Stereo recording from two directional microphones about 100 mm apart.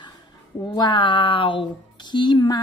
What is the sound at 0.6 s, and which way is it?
Speech, 40° left (ahead or behind).